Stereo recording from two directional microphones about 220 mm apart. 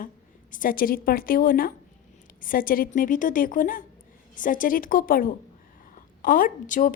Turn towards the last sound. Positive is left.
turn(degrees=35)  # may be behind; listen again after turning